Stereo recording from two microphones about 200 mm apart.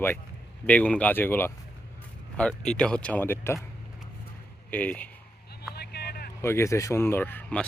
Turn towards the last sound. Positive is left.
turn(degrees=5)  # may be behind; listen again after turning